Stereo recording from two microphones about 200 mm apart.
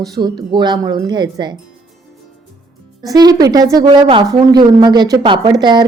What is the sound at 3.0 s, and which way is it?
A woman's voice, 20° right (ahead or behind).